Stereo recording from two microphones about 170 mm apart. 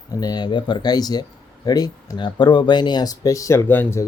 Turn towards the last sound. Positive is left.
turn(degrees=15)  # may be behind; listen again after turning